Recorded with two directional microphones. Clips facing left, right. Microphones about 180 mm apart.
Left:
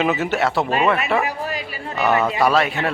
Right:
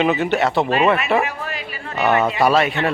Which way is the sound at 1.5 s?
40° left (ahead or behind).